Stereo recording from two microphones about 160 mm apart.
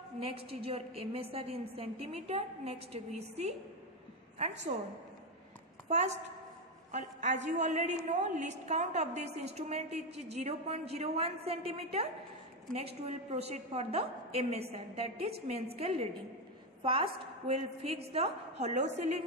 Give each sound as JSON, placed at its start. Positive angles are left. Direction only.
{"t": 0.2, "sound": "a woman's voice", "side_deg": -35}
{"t": 4.7, "sound": "a woman's voice", "side_deg": -45}